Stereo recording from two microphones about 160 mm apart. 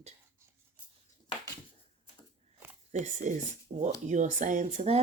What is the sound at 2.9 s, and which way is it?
Speech, 45° right (ahead or behind).